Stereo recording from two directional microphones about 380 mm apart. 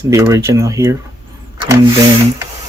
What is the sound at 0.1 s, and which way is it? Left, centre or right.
Speech, centre.